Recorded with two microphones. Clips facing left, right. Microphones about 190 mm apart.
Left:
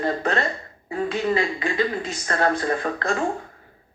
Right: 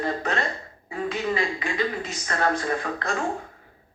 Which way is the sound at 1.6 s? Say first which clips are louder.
Left 3 dB; 40° left (ahead or behind).